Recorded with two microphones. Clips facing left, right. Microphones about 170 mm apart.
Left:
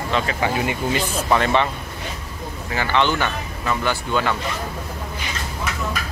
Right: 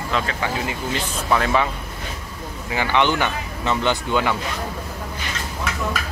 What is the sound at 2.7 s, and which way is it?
Speech, 15° right (ahead or behind).